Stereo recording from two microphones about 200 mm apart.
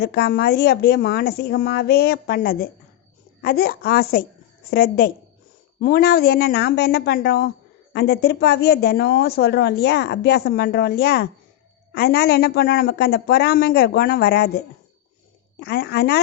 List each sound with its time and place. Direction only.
0.0 s speech: 55° left (ahead or behind)